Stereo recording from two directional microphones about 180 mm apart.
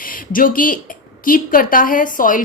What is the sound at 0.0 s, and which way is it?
A woman's voice, 50° left (ahead or behind).